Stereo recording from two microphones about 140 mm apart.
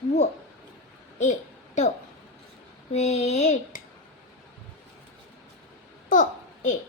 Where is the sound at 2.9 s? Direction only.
50° left (ahead or behind).